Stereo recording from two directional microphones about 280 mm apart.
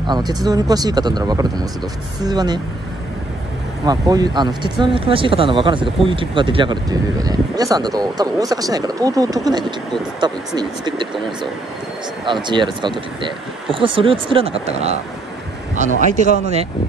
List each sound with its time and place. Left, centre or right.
0.0 s speech: centre
3.8 s speech: centre
12.3 s speech: centre